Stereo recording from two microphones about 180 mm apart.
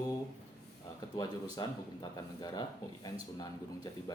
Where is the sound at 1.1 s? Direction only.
20° left (ahead or behind).